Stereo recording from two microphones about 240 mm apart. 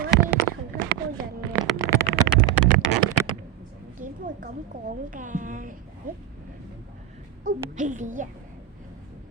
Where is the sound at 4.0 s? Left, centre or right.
Right.